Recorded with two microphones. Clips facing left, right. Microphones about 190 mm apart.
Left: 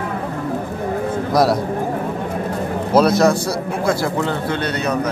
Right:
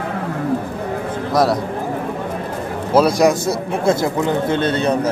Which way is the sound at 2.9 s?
10° right (ahead or behind).